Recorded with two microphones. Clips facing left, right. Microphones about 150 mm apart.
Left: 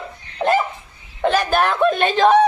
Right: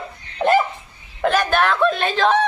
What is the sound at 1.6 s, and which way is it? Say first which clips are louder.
Speech: left 1 dB; 15° left (ahead or behind).